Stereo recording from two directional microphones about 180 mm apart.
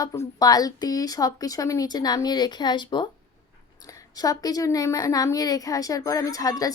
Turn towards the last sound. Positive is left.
turn(degrees=20)  # may be behind; listen again after turning